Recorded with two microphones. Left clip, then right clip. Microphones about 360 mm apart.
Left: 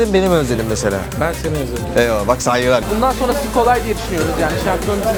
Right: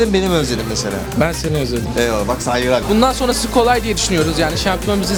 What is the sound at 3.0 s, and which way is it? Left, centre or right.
Speech, right.